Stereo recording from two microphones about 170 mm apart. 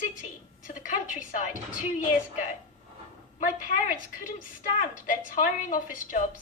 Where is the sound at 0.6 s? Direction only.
50° left (ahead or behind).